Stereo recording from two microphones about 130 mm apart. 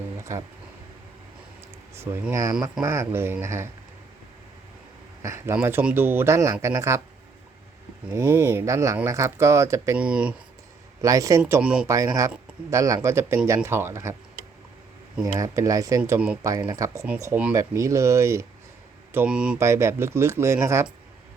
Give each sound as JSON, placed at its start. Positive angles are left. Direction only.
{"t": 2.0, "sound": "speech", "side_deg": -20}
{"t": 5.2, "sound": "speech", "side_deg": -20}
{"t": 8.1, "sound": "speech", "side_deg": -20}
{"t": 10.0, "sound": "speech", "side_deg": -10}
{"t": 11.0, "sound": "speech", "side_deg": -25}
{"t": 11.6, "sound": "speech", "side_deg": -5}
{"t": 11.9, "sound": "speech", "side_deg": -25}
{"t": 15.2, "sound": "speech", "side_deg": -25}
{"t": 19.1, "sound": "speech", "side_deg": -10}
{"t": 19.5, "sound": "speech", "side_deg": -20}